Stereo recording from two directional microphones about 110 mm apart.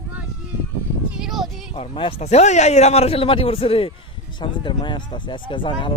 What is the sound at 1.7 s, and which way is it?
Speech, 60° left (ahead or behind).